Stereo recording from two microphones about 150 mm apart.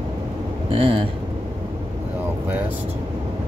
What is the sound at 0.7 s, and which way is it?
Speech, 35° right (ahead or behind).